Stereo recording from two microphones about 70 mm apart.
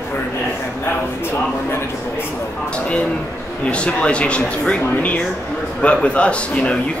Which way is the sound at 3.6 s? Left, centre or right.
Centre.